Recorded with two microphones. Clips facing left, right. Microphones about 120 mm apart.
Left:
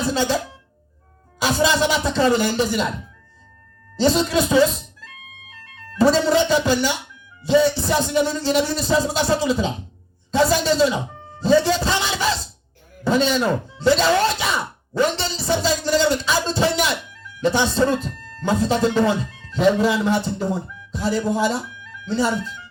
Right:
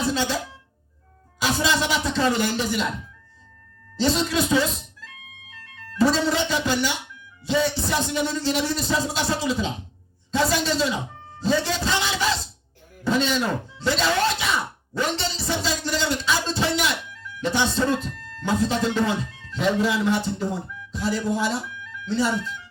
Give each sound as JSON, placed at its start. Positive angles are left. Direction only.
{"t": 0.1, "sound": "speech", "side_deg": 35}
{"t": 1.4, "sound": "speech", "side_deg": 35}
{"t": 3.9, "sound": "speech", "side_deg": 35}
{"t": 6.0, "sound": "speech", "side_deg": 35}